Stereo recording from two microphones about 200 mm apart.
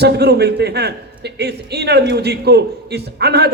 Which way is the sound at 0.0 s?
55° right (ahead or behind).